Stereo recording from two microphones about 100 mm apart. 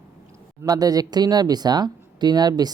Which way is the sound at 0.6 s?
40° right (ahead or behind).